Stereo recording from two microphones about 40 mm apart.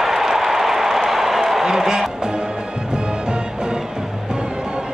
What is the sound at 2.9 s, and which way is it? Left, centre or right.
Music, right.